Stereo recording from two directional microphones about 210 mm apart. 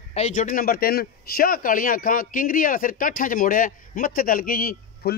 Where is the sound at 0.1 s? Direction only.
35° left (ahead or behind).